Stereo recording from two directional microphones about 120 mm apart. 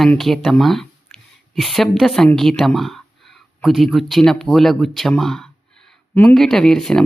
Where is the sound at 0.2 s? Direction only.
Centre (ahead or behind).